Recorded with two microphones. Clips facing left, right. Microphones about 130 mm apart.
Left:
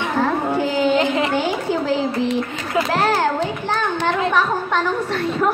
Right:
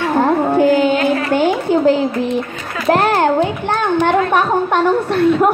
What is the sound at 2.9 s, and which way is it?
A child's voice, 55° right (ahead or behind).